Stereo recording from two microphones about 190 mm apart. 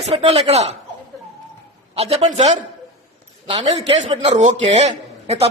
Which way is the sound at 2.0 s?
35° right (ahead or behind).